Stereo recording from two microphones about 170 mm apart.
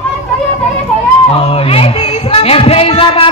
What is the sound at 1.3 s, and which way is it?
Music, 35° left (ahead or behind).